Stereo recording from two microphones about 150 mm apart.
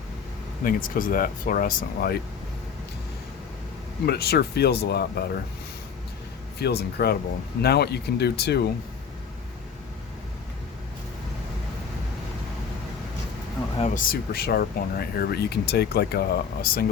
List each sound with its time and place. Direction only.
0.6 s speech: 65° left (ahead or behind); by 2.2 s 90° left
4.0 s speech: 90° left
6.6 s speech: 90° left
13.7 s speech: 55° left (ahead or behind); by 16.8 s 85° left